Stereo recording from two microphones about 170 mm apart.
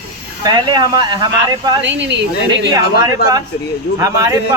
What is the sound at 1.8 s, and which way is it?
Speech, 90° right.